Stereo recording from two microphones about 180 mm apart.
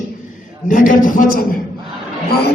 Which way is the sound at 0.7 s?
45° left (ahead or behind).